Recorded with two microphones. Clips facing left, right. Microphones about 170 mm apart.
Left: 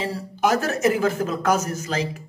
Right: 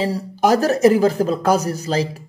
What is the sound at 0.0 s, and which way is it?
Speech, 35° right (ahead or behind).